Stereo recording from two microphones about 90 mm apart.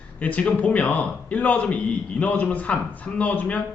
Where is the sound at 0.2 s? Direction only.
15° left (ahead or behind).